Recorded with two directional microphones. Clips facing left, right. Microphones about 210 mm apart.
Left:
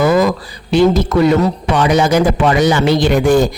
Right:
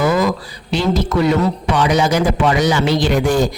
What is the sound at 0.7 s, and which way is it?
A man's voice, 50° left (ahead or behind).